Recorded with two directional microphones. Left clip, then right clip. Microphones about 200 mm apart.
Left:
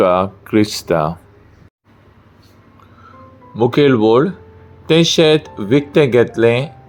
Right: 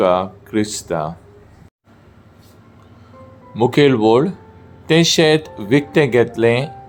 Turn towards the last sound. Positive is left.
turn(degrees=5)  # may be behind; listen again after turning